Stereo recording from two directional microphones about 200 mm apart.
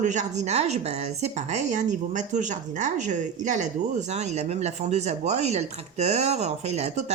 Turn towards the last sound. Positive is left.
turn(degrees=-35)  # may be behind; listen again after turning